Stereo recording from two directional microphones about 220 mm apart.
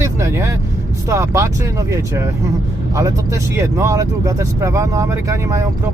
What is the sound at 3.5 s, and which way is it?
Speech, 10° right (ahead or behind).